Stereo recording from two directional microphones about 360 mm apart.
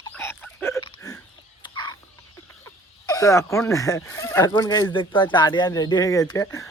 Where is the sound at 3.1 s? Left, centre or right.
Centre.